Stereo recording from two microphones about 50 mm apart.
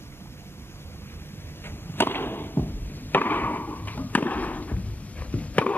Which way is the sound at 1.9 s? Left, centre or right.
Left.